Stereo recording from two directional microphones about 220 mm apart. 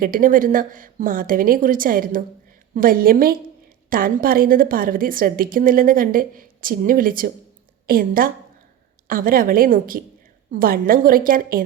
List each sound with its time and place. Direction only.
0.0 s a woman's voice: 40° right (ahead or behind)